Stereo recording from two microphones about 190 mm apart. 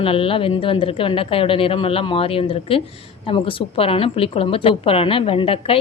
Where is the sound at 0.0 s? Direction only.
30° left (ahead or behind).